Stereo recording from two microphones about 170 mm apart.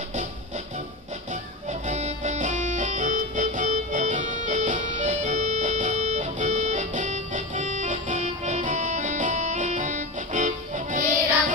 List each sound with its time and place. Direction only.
1.3 s music: 45° right (ahead or behind)